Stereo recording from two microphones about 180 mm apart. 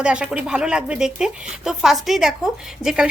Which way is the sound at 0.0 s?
5° right (ahead or behind).